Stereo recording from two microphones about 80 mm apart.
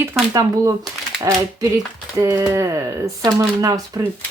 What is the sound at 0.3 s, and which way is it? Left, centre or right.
Speech, right.